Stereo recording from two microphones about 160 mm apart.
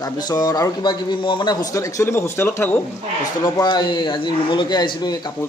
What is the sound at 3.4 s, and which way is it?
A man's voice, 25° left (ahead or behind).